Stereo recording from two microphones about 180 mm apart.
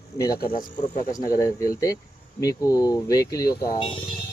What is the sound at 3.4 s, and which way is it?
Speech, 55° left (ahead or behind).